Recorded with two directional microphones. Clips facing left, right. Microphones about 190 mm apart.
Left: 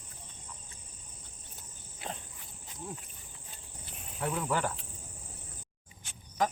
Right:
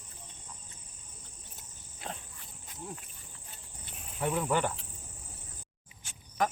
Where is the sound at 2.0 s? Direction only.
5° left (ahead or behind).